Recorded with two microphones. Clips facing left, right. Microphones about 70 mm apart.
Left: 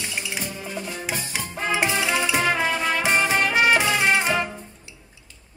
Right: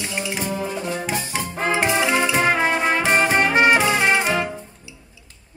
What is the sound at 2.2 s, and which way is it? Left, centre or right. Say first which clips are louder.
Music: right 3 dB; right.